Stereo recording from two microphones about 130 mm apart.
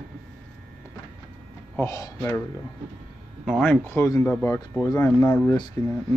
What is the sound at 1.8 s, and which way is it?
Speech, 25° left (ahead or behind).